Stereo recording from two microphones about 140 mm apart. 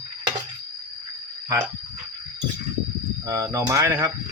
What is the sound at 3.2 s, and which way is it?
Speech, 20° right (ahead or behind).